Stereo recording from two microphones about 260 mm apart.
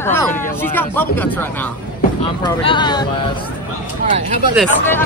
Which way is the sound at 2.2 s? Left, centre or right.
Centre.